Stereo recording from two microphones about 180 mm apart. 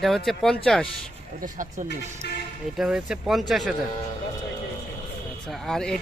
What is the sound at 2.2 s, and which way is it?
Speech, 65° left (ahead or behind).